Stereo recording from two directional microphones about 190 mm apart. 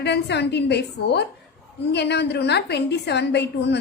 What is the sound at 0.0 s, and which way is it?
A woman's voice, 65° left (ahead or behind).